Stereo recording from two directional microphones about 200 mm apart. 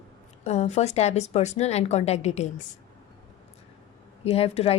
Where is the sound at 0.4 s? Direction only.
35° left (ahead or behind).